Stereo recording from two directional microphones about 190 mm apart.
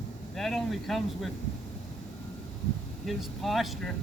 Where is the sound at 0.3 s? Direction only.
Centre (ahead or behind).